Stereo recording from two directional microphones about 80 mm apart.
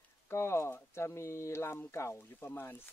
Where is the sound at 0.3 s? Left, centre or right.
Left.